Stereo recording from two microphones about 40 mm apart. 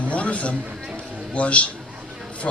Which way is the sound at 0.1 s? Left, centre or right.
Left.